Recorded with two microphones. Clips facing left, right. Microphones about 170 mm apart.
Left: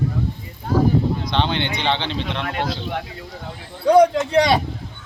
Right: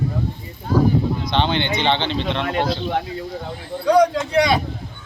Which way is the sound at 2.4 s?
30° right (ahead or behind).